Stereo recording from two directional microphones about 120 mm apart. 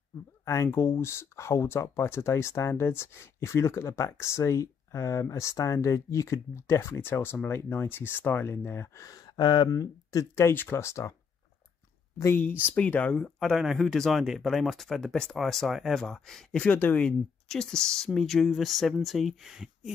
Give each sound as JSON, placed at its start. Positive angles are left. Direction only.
{"t": 0.5, "sound": "speech", "side_deg": 25}
{"t": 12.2, "sound": "speech", "side_deg": 20}